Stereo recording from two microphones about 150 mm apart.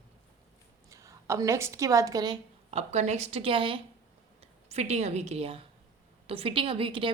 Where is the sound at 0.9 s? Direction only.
20° right (ahead or behind).